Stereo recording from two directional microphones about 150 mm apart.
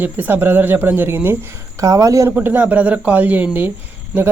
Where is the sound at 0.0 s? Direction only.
10° right (ahead or behind).